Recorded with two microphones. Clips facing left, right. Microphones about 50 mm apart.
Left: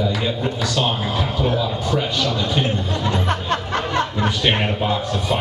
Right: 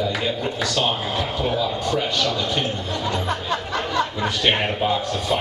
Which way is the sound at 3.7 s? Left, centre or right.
Left.